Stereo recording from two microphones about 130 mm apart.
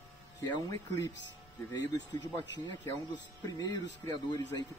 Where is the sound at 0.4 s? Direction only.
30° left (ahead or behind).